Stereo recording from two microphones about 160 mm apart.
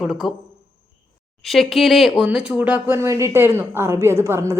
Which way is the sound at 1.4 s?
Centre (ahead or behind).